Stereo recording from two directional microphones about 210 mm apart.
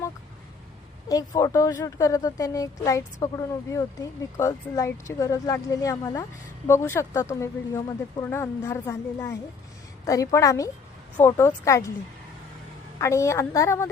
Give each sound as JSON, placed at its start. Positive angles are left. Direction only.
{"t": 1.0, "sound": "speech", "side_deg": 15}
{"t": 13.0, "sound": "speech", "side_deg": 15}